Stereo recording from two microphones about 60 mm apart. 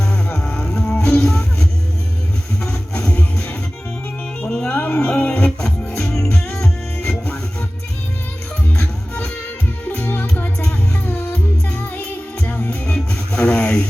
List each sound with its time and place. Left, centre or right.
0.3 s music: centre
4.6 s music: left
5.9 s music: centre
9.9 s music: left
12.5 s music: left
12.9 s music: left
13.5 s a sound: left